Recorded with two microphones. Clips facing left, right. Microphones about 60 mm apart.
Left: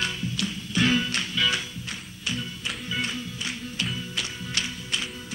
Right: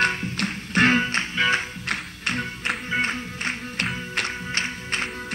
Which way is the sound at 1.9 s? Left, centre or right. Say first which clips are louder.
Right 8 dB; right.